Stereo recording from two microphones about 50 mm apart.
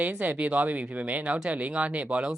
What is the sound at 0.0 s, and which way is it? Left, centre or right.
Speech, right.